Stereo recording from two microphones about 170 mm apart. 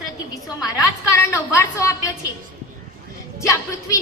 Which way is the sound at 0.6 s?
15° left (ahead or behind).